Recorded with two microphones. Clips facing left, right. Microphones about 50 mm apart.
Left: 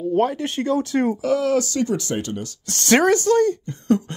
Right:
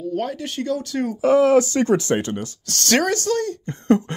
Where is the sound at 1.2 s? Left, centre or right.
Right.